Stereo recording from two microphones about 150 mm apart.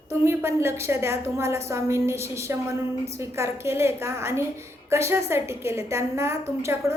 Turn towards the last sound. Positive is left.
turn(degrees=-20)  # may be behind; listen again after turning